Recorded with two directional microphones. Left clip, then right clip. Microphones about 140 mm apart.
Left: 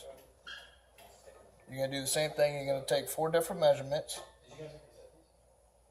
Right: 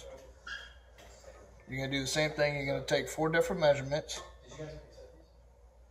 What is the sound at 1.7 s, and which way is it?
Speech, 30° left (ahead or behind).